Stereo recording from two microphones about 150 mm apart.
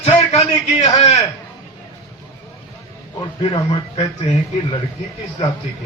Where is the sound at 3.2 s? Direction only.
35° left (ahead or behind).